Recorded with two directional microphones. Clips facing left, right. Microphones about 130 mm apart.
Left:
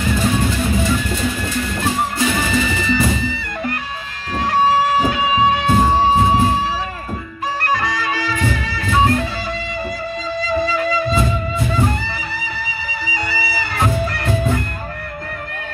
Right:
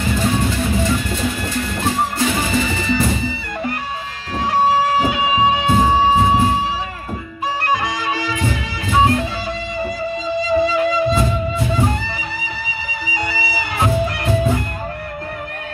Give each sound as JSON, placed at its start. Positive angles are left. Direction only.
{"t": 2.3, "sound": "music", "side_deg": -15}
{"t": 4.5, "sound": "music", "side_deg": -10}
{"t": 7.6, "sound": "music", "side_deg": -15}
{"t": 10.4, "sound": "music", "side_deg": -15}
{"t": 13.0, "sound": "music", "side_deg": -15}